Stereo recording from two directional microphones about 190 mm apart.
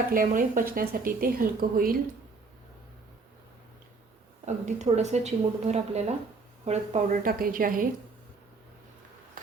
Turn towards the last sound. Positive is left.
turn(degrees=-45)  # may be behind; listen again after turning